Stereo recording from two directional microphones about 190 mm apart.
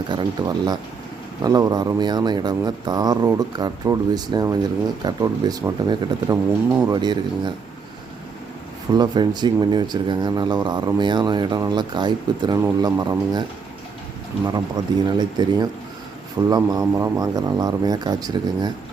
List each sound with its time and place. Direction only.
0.1 s speech: 25° right (ahead or behind)
6.9 s speech: 25° right (ahead or behind)
8.9 s speech: 20° right (ahead or behind)
15.0 s speech: 20° right (ahead or behind)